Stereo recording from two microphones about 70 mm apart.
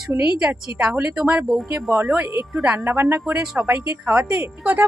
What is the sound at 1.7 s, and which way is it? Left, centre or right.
Speech, right.